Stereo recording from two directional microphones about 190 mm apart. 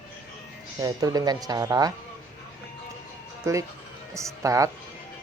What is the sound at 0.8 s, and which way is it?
Speech, 20° right (ahead or behind).